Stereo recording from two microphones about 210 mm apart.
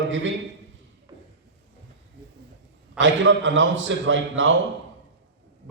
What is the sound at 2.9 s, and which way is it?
A man's voice, 65° right (ahead or behind).